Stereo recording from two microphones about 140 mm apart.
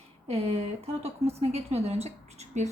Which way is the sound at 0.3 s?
50° right (ahead or behind).